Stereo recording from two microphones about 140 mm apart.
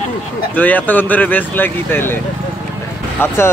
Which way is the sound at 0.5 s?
10° left (ahead or behind).